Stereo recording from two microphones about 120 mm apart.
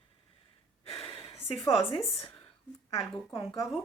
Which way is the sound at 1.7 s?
50° left (ahead or behind).